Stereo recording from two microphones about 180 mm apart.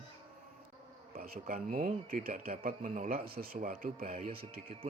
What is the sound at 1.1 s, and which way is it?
Speech, 50° right (ahead or behind).